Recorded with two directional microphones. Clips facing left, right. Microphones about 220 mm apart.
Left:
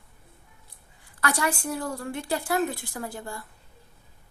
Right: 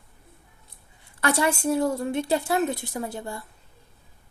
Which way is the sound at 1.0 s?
25° right (ahead or behind).